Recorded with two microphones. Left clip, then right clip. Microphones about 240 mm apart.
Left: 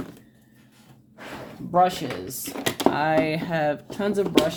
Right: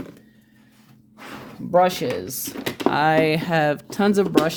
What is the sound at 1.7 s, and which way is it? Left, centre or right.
Speech, right.